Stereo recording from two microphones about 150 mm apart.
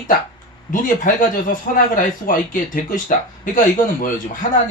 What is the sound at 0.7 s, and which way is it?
Speech, 65° left (ahead or behind).